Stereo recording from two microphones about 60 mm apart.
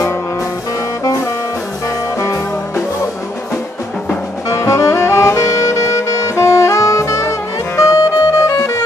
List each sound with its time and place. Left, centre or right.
1.0 s music: left
2.1 s music: left
4.5 s saxophone: left